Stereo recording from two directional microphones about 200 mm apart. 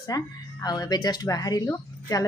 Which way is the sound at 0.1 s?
20° left (ahead or behind).